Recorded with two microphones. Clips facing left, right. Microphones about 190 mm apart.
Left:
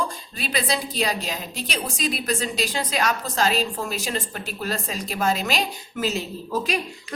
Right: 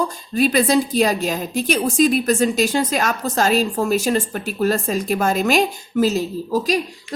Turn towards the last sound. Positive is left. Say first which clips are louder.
# right 6 dB
turn(degrees=-40)  # may be behind; listen again after turning